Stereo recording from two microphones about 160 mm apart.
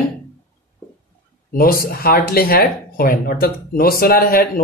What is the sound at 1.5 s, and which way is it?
Speech, 65° left (ahead or behind).